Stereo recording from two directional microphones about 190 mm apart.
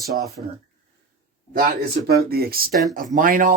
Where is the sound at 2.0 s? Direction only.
55° right (ahead or behind).